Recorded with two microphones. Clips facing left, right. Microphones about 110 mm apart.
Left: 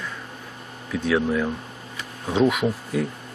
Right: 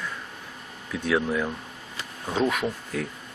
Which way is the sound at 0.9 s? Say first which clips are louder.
Left 3 dB; centre (ahead or behind).